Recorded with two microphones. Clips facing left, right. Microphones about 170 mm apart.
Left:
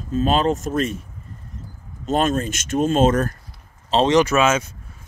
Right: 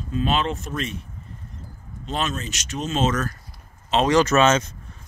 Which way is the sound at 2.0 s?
50° left (ahead or behind).